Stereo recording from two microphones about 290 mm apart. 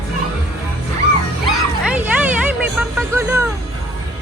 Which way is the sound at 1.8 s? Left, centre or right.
Centre.